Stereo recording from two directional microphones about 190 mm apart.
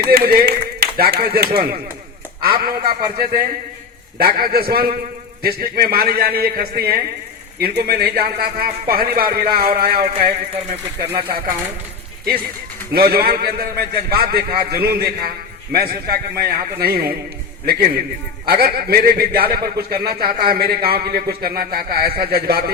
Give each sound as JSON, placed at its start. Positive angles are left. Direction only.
{"t": 0.1, "sound": "speech", "side_deg": -50}
{"t": 12.9, "sound": "speech", "side_deg": -55}